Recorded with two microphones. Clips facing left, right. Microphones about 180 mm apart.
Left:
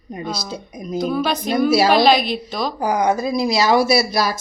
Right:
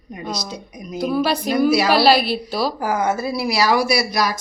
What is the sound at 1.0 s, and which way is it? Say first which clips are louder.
Speech: right 1 dB; 5° right (ahead or behind).